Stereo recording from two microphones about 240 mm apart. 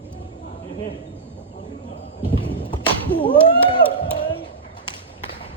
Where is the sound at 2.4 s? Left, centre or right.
Left.